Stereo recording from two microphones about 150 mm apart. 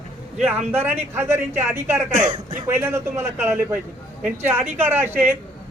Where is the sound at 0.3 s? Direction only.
5° right (ahead or behind).